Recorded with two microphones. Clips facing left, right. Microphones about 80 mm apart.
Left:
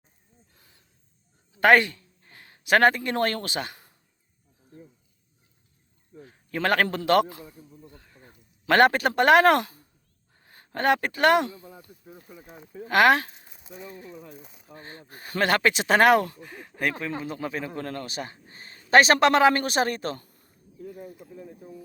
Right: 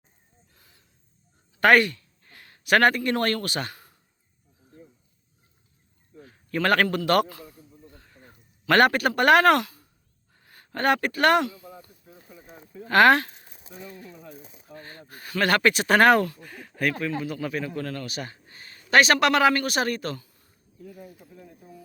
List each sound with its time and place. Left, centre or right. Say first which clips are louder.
0.5 s snort: right 1 dB; left
1.6 s speech: even; left
6.1 s a sound: right 3 dB; centre
8.6 s a man's voice: even; left
11.4 s speech: right 2 dB; left
12.0 s a man's voice: left 2 dB; left
13.9 s a man's voice: left 1 dB; left
20.1 s a sound: right 1 dB; left